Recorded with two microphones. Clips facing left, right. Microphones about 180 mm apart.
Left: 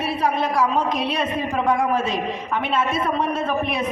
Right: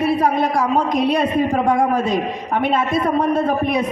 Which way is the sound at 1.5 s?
40° right (ahead or behind).